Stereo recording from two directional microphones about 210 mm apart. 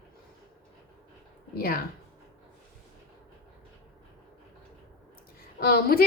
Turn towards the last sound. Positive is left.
turn(degrees=45)  # may be behind; listen again after turning